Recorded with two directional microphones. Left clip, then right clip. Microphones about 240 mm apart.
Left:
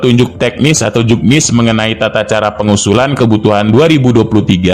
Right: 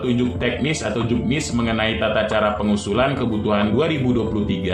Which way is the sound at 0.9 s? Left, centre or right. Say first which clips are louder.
Left 12 dB; left.